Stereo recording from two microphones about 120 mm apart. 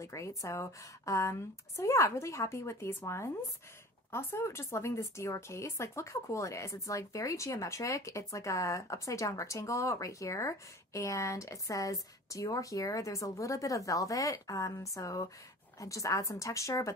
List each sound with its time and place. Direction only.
0.0 s speech: 25° left (ahead or behind)